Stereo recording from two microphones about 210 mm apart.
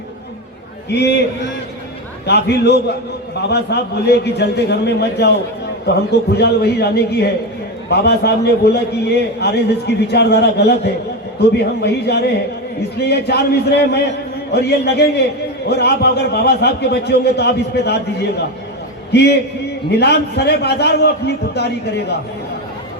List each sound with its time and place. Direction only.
0.9 s a man's voice: 55° left (ahead or behind)
19.1 s a man's voice: 50° left (ahead or behind)